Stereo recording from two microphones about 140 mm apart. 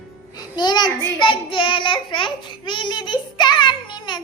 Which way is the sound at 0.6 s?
30° left (ahead or behind).